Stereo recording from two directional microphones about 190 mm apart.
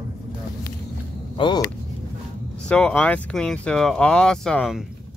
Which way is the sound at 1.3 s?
25° left (ahead or behind).